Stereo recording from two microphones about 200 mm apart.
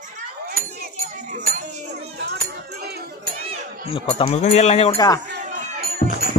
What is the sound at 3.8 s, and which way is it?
Speech, 25° left (ahead or behind).